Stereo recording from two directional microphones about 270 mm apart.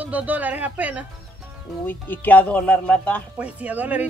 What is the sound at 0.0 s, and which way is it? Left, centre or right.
A woman's voice, centre.